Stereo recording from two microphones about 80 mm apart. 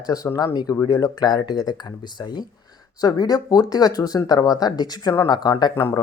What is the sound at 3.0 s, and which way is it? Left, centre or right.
Speech, left.